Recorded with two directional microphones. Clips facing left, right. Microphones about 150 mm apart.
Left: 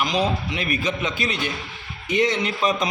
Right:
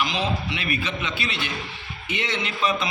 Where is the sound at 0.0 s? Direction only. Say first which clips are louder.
Left 3 dB; 40° left (ahead or behind).